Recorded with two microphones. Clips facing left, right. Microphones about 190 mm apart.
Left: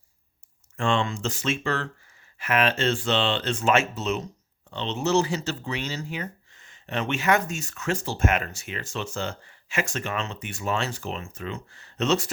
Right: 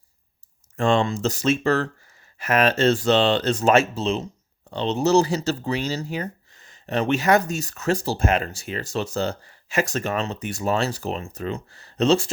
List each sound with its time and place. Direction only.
0.8 s speech: 40° right (ahead or behind)